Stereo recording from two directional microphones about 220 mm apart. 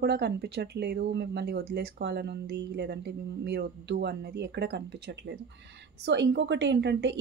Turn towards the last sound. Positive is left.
turn(degrees=-50)  # may be behind; listen again after turning